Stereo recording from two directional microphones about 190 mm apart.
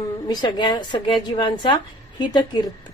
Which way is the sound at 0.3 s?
25° left (ahead or behind).